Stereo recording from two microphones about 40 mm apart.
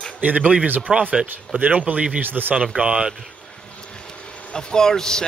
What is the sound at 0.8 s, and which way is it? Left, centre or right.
Speech, right.